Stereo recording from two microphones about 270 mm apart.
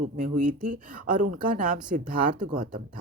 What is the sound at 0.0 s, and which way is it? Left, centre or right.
Speech, right.